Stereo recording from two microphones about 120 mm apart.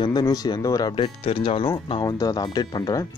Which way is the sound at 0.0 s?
35° left (ahead or behind).